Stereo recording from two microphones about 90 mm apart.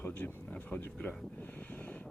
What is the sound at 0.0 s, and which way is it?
Speech, 20° left (ahead or behind).